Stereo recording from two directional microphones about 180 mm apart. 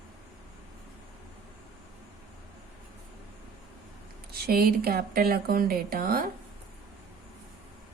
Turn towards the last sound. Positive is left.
turn(degrees=-55)  # may be behind; listen again after turning